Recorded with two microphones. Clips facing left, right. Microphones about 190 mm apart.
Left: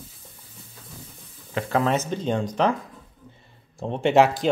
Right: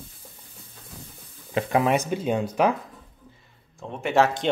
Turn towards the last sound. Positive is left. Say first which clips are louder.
# left 4 dB
turn(degrees=25)  # may be behind; listen again after turning